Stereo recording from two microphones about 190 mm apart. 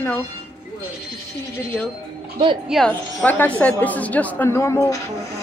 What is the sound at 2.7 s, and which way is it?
A woman's voice, 5° left (ahead or behind).